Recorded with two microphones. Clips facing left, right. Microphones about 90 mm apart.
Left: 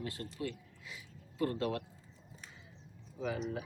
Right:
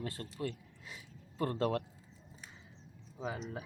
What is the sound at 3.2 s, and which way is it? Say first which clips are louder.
Speech: left 2 dB; 30° right (ahead or behind).